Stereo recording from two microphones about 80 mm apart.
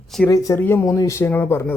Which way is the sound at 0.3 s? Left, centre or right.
Left.